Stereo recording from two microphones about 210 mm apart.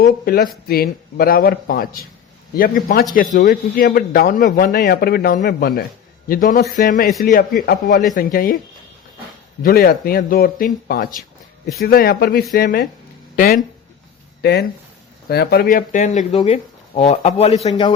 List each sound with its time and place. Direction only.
0.0 s a man's voice: 45° left (ahead or behind)
9.6 s a man's voice: 45° left (ahead or behind); by 17.7 s 30° left (ahead or behind)
17.7 s a man's voice: 20° left (ahead or behind)